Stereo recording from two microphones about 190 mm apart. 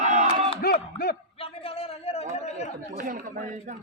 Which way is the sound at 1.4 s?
30° left (ahead or behind).